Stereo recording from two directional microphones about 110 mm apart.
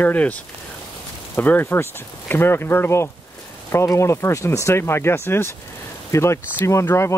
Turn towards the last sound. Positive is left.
turn(degrees=25)  # may be behind; listen again after turning